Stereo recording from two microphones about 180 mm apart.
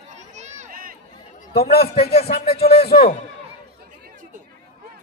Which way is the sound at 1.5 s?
60° left (ahead or behind).